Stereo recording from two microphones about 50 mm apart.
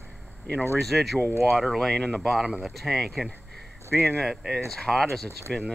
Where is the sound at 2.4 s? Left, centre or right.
Centre.